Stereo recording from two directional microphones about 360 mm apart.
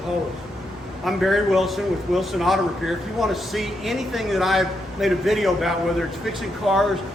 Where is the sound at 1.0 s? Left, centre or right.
Centre.